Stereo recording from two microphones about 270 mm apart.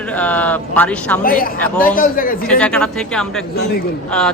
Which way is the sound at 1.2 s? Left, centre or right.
Left.